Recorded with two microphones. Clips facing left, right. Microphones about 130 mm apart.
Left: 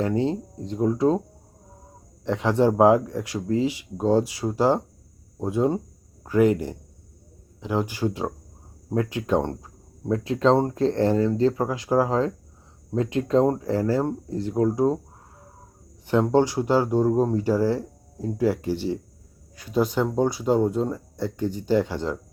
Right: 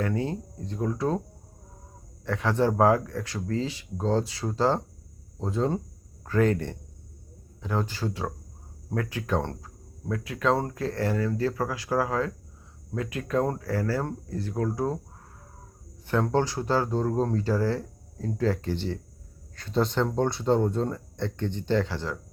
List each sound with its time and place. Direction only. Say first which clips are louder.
0.0 s speech: left 5 dB; 25° left (ahead or behind)
2.2 s speech: left 4 dB; 20° left (ahead or behind)
10.1 s speech: left 6 dB; 25° left (ahead or behind)
16.0 s speech: left 5 dB; 15° left (ahead or behind)